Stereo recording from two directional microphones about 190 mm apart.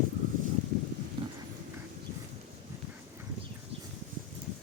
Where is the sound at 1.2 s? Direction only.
25° right (ahead or behind).